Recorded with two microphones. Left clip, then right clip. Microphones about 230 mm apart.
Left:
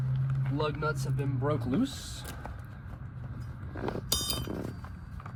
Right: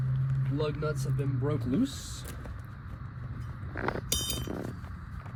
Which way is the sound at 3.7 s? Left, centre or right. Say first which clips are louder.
Right 3 dB; left.